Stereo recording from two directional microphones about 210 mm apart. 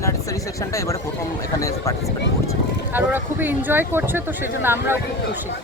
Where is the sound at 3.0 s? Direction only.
10° right (ahead or behind).